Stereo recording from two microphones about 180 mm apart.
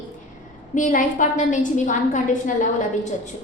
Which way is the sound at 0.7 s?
45° left (ahead or behind).